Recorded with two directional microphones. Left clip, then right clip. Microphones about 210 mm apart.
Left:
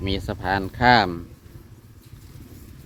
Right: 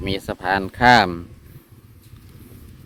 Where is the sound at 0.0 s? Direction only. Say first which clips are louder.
Right 3 dB; 25° right (ahead or behind).